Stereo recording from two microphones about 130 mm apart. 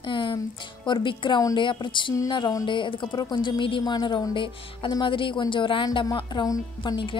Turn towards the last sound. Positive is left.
turn(degrees=35)  # may be behind; listen again after turning